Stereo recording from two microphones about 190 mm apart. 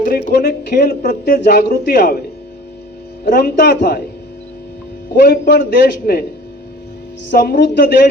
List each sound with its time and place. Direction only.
0.3 s speech: 60° left (ahead or behind)
3.2 s speech: 55° left (ahead or behind)
5.1 s speech: 60° left (ahead or behind)
7.3 s speech: 50° left (ahead or behind)